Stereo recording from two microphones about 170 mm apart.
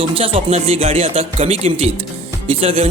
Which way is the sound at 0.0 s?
35° right (ahead or behind).